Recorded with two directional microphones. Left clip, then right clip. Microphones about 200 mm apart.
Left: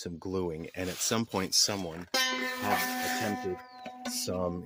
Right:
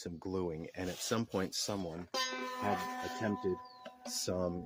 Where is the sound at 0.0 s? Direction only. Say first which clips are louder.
Left 5 dB; 45° left (ahead or behind).